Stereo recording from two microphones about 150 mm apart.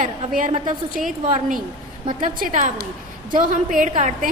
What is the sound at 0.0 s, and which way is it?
A woman's voice, 60° right (ahead or behind).